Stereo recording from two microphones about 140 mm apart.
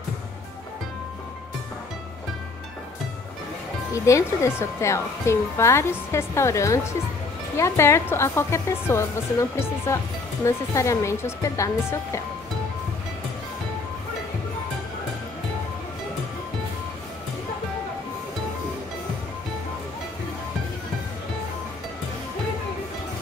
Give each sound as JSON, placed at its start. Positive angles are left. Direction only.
{"t": 3.9, "sound": "speech", "side_deg": 20}